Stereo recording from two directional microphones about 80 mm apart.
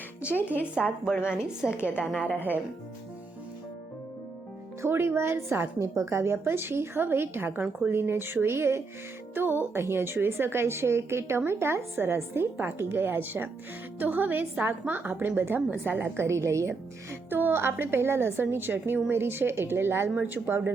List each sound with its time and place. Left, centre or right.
0.3 s a woman's voice: left
1.0 s a woman's voice: centre
2.2 s a woman's voice: left
4.8 s a woman's voice: right
17.2 s a woman's voice: right